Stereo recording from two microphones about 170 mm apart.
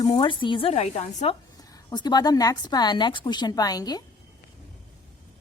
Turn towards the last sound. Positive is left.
turn(degrees=25)  # may be behind; listen again after turning